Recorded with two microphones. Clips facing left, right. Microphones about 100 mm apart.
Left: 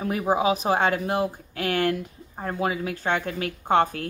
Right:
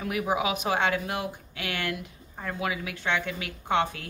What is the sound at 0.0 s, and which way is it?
Speech, 35° left (ahead or behind).